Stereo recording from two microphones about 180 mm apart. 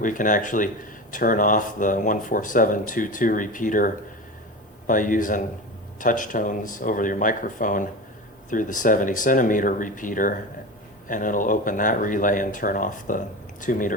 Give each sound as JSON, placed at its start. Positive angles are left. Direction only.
{"t": 0.0, "sound": "speech", "side_deg": 45}